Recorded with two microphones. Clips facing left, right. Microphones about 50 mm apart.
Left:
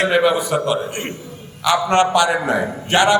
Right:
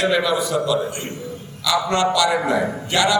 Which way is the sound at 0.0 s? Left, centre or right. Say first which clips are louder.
Left 3 dB; left.